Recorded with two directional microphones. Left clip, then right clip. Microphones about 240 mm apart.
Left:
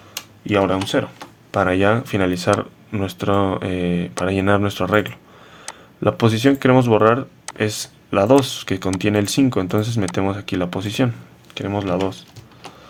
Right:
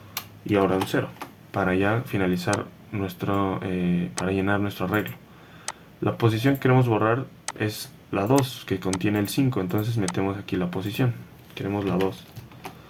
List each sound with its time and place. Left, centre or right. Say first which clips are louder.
0.4 s speech: left 4 dB; left